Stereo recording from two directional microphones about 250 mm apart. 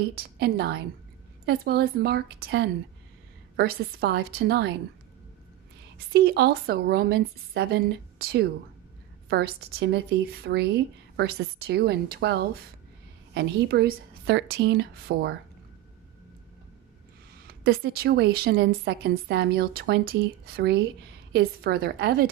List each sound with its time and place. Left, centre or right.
0.1 s speech: right
6.1 s speech: right
17.5 s speech: right